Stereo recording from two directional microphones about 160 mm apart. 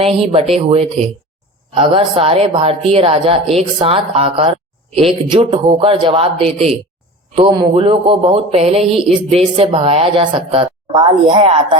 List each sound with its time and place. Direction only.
0.0 s speech: 35° right (ahead or behind)